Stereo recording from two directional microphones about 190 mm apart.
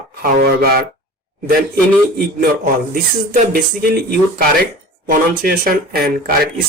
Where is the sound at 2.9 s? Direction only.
50° right (ahead or behind).